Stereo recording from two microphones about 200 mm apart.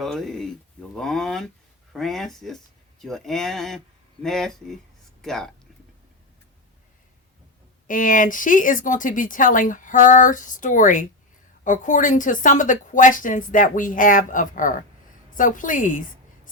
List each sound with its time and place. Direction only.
0.0 s speech: centre (ahead or behind)
7.9 s a woman's voice: 40° left (ahead or behind)